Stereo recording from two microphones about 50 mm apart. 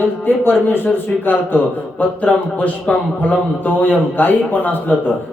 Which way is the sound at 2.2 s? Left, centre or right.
Left.